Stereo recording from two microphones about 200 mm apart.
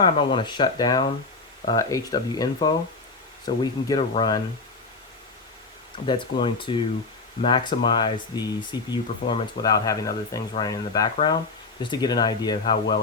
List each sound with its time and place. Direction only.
0.0 s speech: 25° left (ahead or behind)
6.1 s speech: 25° left (ahead or behind)